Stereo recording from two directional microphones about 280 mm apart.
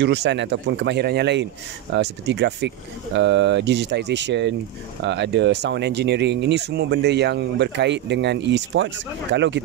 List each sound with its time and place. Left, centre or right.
0.0 s speech: right